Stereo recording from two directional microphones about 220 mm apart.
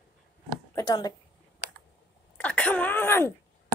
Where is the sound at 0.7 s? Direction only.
15° left (ahead or behind).